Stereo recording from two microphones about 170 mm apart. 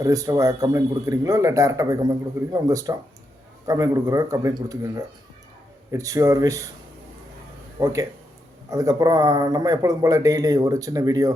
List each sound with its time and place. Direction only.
0.0 s a man's voice: 20° right (ahead or behind)
8.7 s a man's voice: 20° right (ahead or behind)